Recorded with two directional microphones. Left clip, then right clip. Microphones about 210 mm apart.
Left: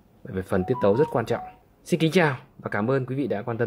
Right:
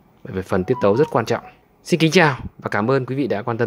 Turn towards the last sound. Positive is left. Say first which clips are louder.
# right 5 dB
turn(degrees=-15)  # may be behind; listen again after turning